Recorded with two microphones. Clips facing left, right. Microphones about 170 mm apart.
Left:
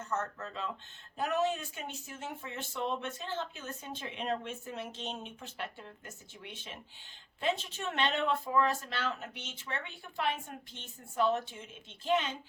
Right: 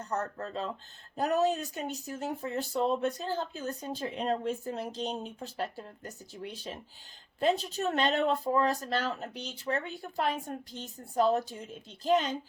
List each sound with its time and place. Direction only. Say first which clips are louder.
0.0 s speech: right 3 dB; 35° right (ahead or behind)